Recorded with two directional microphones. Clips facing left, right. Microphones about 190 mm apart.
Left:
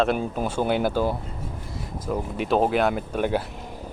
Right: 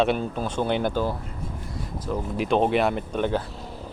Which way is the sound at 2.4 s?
5° left (ahead or behind).